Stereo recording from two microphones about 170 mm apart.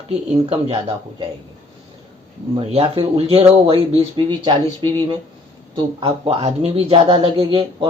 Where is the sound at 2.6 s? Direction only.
35° right (ahead or behind).